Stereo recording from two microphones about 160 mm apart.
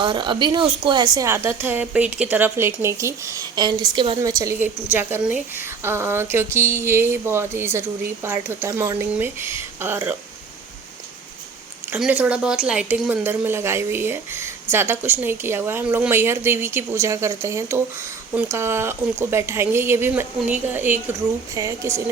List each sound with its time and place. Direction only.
0.0 s a woman's voice: 30° right (ahead or behind)
4.2 s speech: 20° right (ahead or behind)
11.9 s speech: 10° right (ahead or behind)